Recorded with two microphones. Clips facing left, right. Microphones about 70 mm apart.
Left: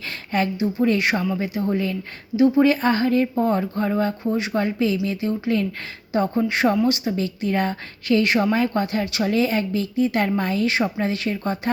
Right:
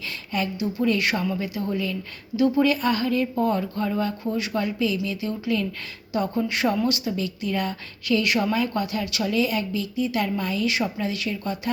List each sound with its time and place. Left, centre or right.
0.6 s a woman's voice: left